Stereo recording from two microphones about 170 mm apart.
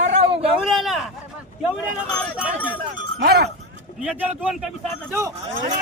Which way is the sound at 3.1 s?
65° right (ahead or behind).